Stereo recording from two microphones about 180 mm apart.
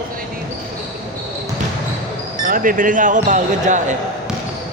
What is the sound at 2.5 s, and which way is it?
Speech, 50° right (ahead or behind).